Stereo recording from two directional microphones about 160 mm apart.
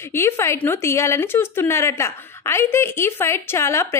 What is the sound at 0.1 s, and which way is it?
Speech, 15° left (ahead or behind).